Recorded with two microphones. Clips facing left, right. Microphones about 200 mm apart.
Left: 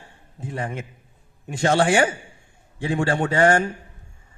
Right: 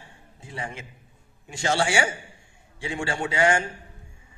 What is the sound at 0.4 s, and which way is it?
A man's voice, 55° left (ahead or behind).